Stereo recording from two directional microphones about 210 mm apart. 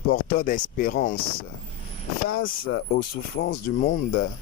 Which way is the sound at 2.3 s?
50° left (ahead or behind).